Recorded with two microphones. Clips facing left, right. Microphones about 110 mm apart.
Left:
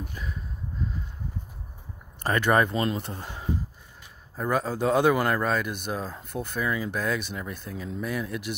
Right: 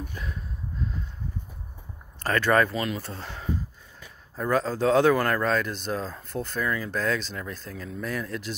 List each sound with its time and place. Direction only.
2.2 s speech: 15° left (ahead or behind)
3.1 s speech: 15° left (ahead or behind)